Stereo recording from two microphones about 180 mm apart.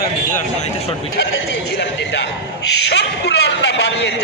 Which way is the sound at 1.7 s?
70° left (ahead or behind).